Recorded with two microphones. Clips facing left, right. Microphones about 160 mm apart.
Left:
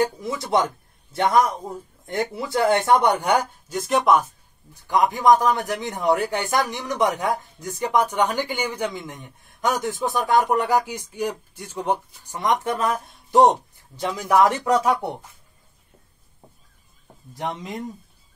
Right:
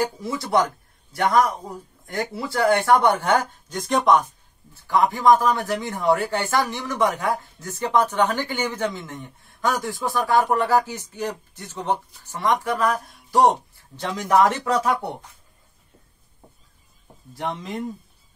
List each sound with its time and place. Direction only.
0.0 s a man's voice: 20° left (ahead or behind)
4.7 s a man's voice: 15° left (ahead or behind)
13.0 s a sound: 20° left (ahead or behind)
14.1 s speech: 10° left (ahead or behind)
17.4 s a man's voice: 20° left (ahead or behind)